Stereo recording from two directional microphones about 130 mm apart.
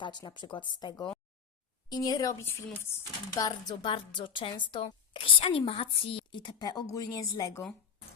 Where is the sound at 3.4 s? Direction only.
30° left (ahead or behind).